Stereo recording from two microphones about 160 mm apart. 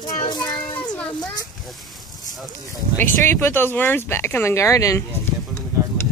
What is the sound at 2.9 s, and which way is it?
Speech, 15° left (ahead or behind).